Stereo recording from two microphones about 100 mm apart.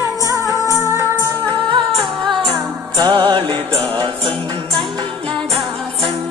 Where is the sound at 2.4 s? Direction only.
45° right (ahead or behind); by 4.0 s 60° right (ahead or behind).